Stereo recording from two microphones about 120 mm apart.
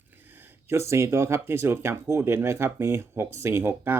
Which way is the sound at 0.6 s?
20° right (ahead or behind).